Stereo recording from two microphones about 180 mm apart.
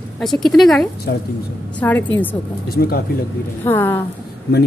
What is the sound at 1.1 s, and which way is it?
Speech, 65° left (ahead or behind).